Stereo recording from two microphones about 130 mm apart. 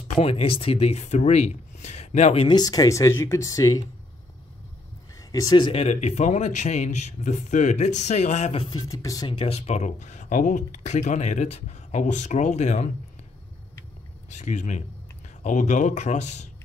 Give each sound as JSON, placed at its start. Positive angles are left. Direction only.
{"t": 0.2, "sound": "speech", "side_deg": 50}
{"t": 2.4, "sound": "speech", "side_deg": 30}
{"t": 5.3, "sound": "speech", "side_deg": 30}
{"t": 5.7, "sound": "speech", "side_deg": 55}
{"t": 8.6, "sound": "speech", "side_deg": 30}
{"t": 9.3, "sound": "speech", "side_deg": 50}
{"t": 14.3, "sound": "a man's voice", "side_deg": 70}